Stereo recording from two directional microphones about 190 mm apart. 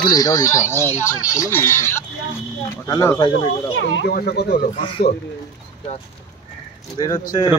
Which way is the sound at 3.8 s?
75° left (ahead or behind).